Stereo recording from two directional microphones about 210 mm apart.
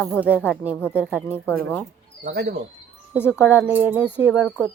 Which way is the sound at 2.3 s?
45° right (ahead or behind).